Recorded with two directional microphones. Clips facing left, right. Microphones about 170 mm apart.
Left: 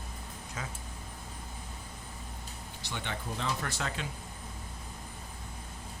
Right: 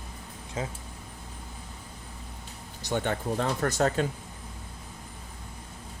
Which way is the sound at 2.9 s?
50° right (ahead or behind).